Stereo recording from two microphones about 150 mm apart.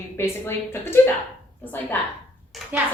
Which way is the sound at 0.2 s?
15° left (ahead or behind).